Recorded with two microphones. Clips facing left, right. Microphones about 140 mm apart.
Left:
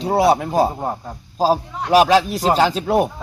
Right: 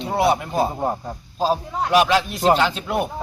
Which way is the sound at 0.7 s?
Centre (ahead or behind).